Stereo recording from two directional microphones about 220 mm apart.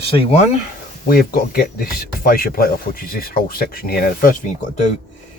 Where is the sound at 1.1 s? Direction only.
45° left (ahead or behind).